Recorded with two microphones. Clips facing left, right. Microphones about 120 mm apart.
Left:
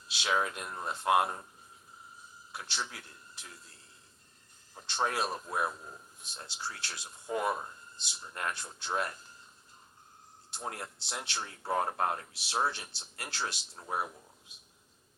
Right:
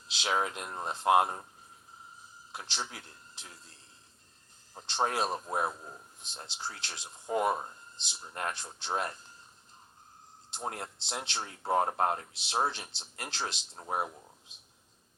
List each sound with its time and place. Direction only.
0.2 s speech: 25° right (ahead or behind)
2.5 s speech: 25° right (ahead or behind)
4.7 s speech: 20° right (ahead or behind)
10.5 s speech: 25° right (ahead or behind)